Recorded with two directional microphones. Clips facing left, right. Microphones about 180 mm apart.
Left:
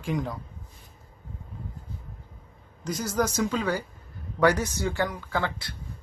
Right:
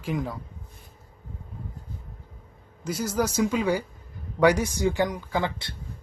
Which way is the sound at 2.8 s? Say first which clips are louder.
Right 1 dB; 5° right (ahead or behind).